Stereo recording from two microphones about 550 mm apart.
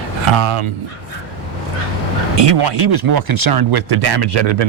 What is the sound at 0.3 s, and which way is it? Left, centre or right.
Speech, right.